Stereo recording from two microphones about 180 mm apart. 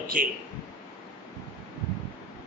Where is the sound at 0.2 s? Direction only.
45° right (ahead or behind).